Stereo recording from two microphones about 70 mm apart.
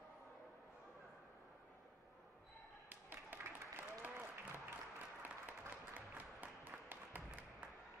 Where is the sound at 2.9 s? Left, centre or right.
Right.